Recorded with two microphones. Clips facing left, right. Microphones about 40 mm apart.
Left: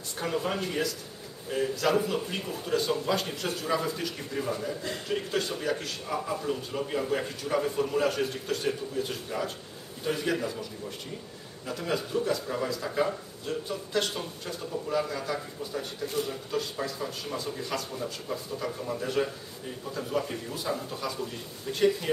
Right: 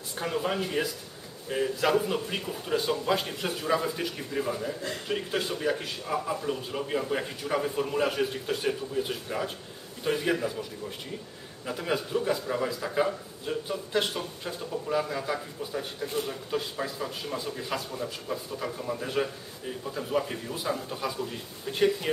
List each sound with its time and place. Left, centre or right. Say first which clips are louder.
0.2 s a man's voice: right 1 dB; centre